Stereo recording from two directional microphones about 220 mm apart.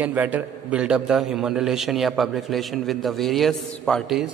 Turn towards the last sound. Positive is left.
turn(degrees=0)  # may be behind; listen again after turning